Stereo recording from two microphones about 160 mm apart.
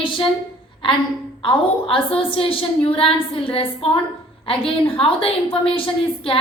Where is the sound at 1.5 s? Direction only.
35° left (ahead or behind).